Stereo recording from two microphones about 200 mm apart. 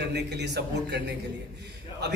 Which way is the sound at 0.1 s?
60° right (ahead or behind).